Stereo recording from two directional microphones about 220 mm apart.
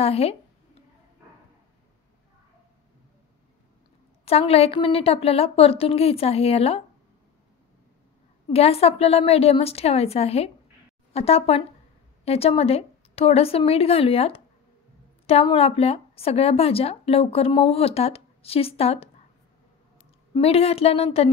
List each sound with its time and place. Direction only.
0.0 s speech: 25° left (ahead or behind)
4.2 s speech: 25° left (ahead or behind)
8.5 s speech: 25° left (ahead or behind)
20.3 s speech: 25° left (ahead or behind)